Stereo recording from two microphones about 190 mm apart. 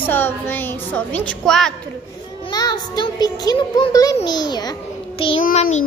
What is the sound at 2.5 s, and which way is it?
A child's voice, 20° left (ahead or behind).